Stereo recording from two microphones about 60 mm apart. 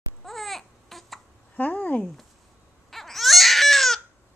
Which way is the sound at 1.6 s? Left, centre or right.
Left.